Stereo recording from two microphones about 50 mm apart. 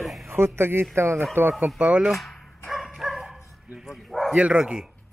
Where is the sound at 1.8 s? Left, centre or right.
Right.